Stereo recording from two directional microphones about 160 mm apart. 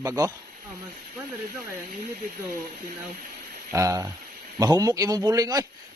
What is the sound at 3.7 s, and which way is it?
A man's voice, 20° right (ahead or behind).